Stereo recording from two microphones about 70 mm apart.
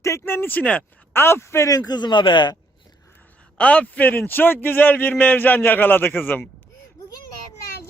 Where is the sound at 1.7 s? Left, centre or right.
Left.